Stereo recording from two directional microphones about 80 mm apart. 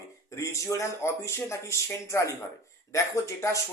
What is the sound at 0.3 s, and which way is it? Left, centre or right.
Speech, left.